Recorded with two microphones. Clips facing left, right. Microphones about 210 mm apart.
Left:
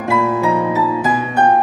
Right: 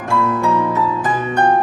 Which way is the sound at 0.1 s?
5° left (ahead or behind).